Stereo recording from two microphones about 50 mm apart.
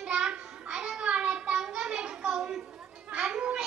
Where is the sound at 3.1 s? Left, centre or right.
Right.